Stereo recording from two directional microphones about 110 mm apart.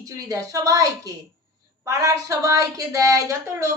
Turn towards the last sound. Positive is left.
turn(degrees=-30)  # may be behind; listen again after turning